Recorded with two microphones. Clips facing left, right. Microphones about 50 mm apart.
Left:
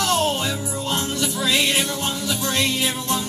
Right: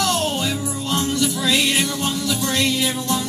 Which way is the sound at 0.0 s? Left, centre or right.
Centre.